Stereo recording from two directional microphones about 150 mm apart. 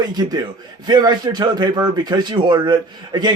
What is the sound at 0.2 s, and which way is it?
A man's voice, 25° right (ahead or behind).